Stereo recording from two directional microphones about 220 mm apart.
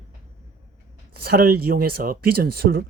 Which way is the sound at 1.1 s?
45° right (ahead or behind).